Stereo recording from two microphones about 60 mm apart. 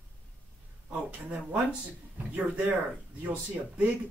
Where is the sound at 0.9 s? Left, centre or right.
Right.